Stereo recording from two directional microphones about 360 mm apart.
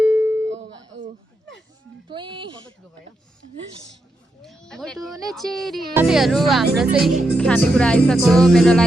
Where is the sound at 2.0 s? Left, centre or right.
Centre.